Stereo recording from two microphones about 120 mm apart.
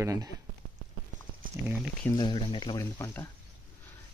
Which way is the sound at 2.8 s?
20° left (ahead or behind).